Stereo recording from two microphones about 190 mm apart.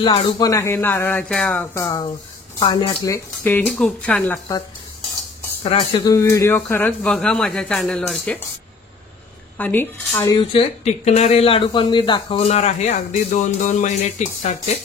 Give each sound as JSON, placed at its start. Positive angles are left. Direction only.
{"t": 0.0, "sound": "speech", "side_deg": 25}
{"t": 3.4, "sound": "speech", "side_deg": 5}
{"t": 5.6, "sound": "speech", "side_deg": 25}
{"t": 9.6, "sound": "speech", "side_deg": 10}
{"t": 10.5, "sound": "speech", "side_deg": 30}